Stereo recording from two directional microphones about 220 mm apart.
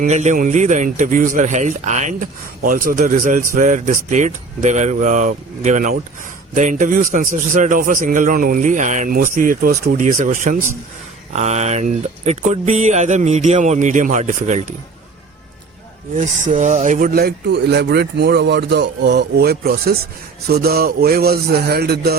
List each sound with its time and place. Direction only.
0.0 s speech: 30° right (ahead or behind)
16.1 s speech: 35° right (ahead or behind)